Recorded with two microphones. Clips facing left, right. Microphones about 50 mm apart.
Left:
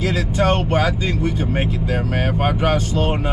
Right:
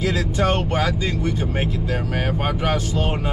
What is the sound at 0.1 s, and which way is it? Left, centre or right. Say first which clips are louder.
Speech: left 2 dB; centre.